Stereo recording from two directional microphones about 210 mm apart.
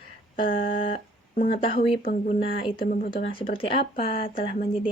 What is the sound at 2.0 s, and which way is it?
Speech, 40° left (ahead or behind).